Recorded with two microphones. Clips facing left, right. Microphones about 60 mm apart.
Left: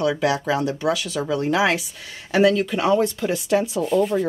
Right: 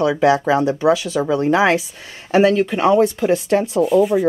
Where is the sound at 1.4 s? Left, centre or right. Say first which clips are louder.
Right 4 dB; right.